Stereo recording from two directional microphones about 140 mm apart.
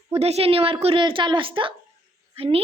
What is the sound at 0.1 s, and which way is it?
A woman's voice, 45° right (ahead or behind).